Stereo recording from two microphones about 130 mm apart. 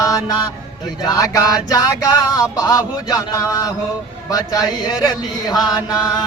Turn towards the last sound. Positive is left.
turn(degrees=30)  # may be behind; listen again after turning